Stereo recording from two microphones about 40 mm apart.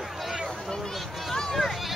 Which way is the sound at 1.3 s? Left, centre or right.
Centre.